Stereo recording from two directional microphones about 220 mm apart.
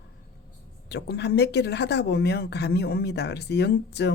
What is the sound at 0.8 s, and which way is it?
Speech, 50° left (ahead or behind).